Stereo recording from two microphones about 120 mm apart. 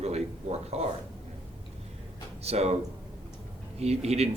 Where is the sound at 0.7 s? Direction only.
65° right (ahead or behind).